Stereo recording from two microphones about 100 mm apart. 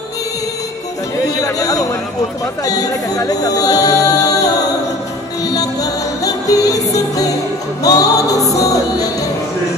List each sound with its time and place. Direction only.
1.4 s speech: 35° left (ahead or behind)
5.5 s music: 35° left (ahead or behind)